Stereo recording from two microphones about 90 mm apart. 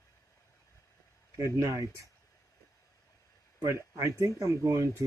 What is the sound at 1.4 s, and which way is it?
Speech, 35° right (ahead or behind).